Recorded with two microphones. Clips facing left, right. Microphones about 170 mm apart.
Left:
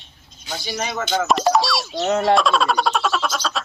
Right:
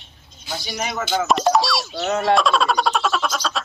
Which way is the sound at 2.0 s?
30° left (ahead or behind).